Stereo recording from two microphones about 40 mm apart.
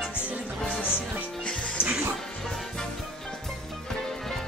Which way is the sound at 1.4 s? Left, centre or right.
Left.